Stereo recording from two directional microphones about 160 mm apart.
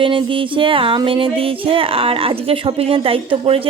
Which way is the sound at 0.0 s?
30° right (ahead or behind).